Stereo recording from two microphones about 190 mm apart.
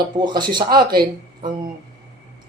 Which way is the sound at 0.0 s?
25° right (ahead or behind).